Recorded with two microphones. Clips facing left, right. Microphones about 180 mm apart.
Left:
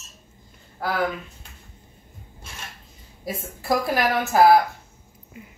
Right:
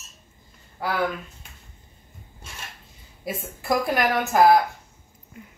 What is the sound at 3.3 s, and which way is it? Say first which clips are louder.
Speech: left 1 dB; centre (ahead or behind).